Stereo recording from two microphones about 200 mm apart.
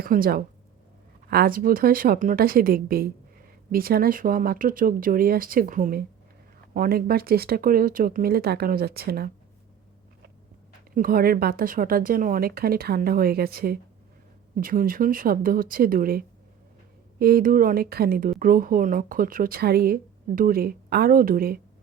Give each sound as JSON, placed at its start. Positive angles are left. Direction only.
{"t": 0.0, "sound": "speech", "side_deg": -45}
{"t": 10.9, "sound": "speech", "side_deg": -45}